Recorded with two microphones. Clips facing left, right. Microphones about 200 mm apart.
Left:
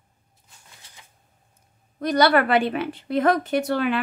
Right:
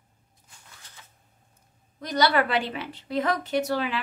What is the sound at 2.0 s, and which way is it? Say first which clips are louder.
A woman's voice: left 5 dB; 55° left (ahead or behind).